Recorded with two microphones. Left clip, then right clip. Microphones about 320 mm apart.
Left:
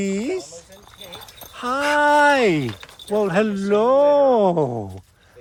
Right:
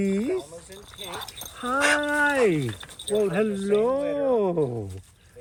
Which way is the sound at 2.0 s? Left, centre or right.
Centre.